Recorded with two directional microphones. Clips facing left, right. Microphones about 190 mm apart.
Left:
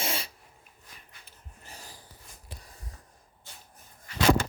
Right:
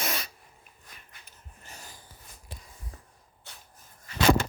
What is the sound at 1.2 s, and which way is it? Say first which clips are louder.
Dog: left 1 dB; 30° left (ahead or behind).